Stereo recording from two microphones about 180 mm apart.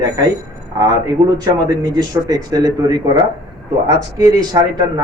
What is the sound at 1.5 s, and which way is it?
A man's voice, 20° right (ahead or behind).